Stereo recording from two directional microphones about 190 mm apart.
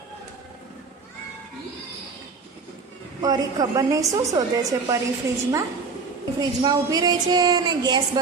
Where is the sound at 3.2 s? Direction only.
20° right (ahead or behind).